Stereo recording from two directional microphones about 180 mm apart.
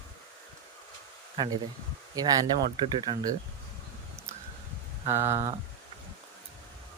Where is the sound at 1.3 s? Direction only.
25° right (ahead or behind).